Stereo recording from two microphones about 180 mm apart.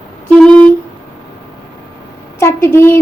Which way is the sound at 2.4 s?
15° left (ahead or behind).